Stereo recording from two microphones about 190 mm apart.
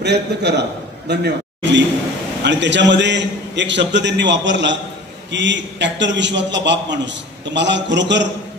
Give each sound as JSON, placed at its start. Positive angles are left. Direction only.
{"t": 0.0, "sound": "a man's voice", "side_deg": -60}